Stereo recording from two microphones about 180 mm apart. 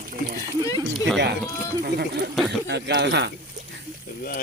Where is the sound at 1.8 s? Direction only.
65° right (ahead or behind).